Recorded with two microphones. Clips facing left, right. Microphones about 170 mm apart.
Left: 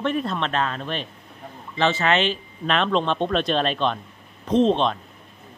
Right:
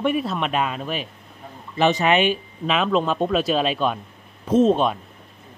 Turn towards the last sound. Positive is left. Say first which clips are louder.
# right 2 dB
turn(degrees=-10)  # may be behind; listen again after turning